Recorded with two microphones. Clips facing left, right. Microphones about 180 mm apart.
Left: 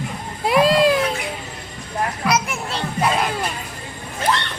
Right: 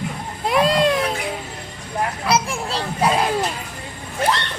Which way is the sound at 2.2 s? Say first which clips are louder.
Right 1 dB; 30° right (ahead or behind).